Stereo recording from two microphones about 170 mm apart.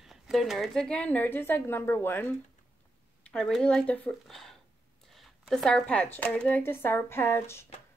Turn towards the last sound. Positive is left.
turn(degrees=15)  # may be behind; listen again after turning